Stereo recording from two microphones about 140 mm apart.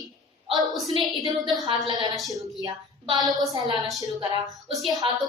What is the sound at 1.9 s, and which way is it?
Speech, 30° right (ahead or behind).